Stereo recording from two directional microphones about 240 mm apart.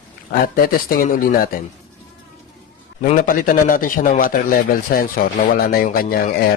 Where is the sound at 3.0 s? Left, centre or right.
Left.